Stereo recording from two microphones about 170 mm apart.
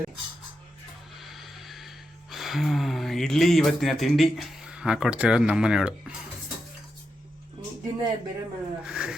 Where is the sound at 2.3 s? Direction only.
Centre (ahead or behind).